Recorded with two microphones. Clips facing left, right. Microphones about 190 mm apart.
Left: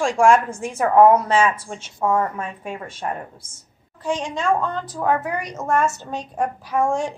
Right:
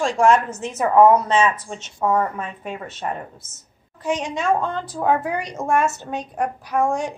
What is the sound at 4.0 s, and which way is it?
A woman's voice, 20° right (ahead or behind).